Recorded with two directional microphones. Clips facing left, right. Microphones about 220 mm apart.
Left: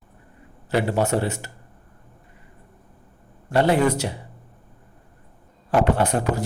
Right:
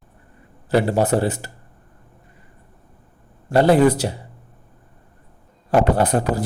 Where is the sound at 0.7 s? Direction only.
40° right (ahead or behind).